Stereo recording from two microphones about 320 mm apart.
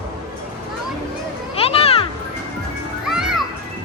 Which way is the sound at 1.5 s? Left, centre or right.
Centre.